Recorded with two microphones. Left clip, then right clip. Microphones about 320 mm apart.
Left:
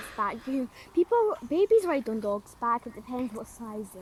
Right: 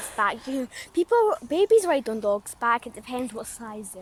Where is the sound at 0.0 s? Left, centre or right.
Right.